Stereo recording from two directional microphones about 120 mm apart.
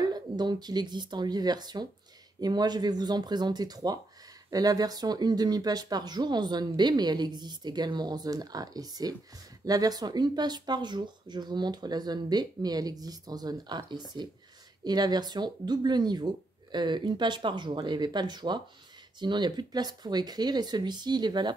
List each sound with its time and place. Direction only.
0.0 s speech: 35° right (ahead or behind)